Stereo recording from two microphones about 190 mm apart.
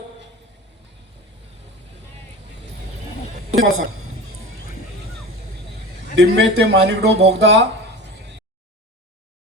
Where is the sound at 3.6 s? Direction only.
90° right.